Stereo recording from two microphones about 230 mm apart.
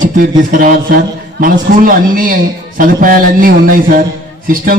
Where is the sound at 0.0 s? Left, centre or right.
Right.